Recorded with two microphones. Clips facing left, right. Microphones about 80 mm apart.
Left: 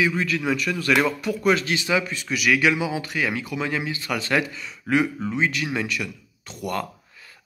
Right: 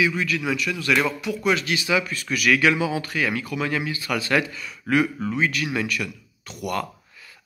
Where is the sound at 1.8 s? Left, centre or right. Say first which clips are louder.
Right 2 dB; left.